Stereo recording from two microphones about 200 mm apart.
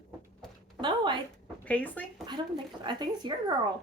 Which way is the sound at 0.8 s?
25° right (ahead or behind).